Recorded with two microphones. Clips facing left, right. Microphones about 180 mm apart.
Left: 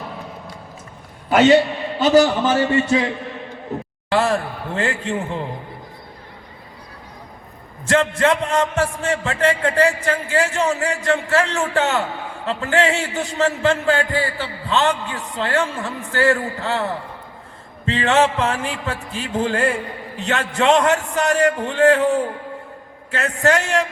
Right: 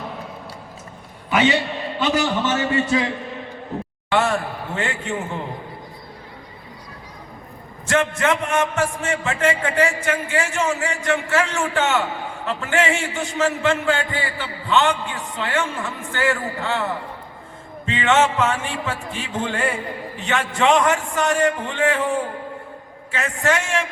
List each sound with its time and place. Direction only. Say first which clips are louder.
1.3 s a man's voice: left 6 dB; 50° left (ahead or behind)
2.0 s a man's voice: left 7 dB; 35° left (ahead or behind)
4.1 s a sound: left 2 dB; 35° left (ahead or behind)
7.9 s a man's voice: left 3 dB; 30° left (ahead or behind)
17.8 s a man's voice: left 1 dB; 35° left (ahead or behind)
23.1 s a man's voice: left 3 dB; 35° left (ahead or behind)